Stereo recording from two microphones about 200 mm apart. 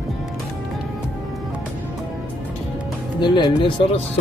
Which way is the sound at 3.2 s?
20° left (ahead or behind).